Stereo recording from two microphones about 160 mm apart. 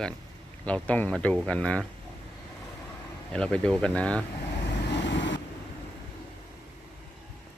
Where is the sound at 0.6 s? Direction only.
10° left (ahead or behind).